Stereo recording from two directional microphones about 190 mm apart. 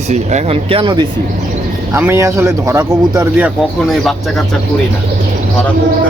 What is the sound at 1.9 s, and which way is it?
Speech, 15° right (ahead or behind).